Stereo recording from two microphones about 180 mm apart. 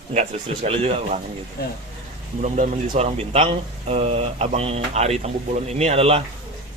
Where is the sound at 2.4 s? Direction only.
40° right (ahead or behind).